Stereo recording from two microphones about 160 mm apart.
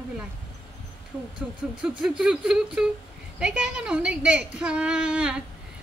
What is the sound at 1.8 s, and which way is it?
A woman's voice, 5° right (ahead or behind).